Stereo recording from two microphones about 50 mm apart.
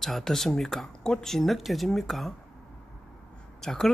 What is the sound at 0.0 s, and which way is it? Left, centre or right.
Speech, centre.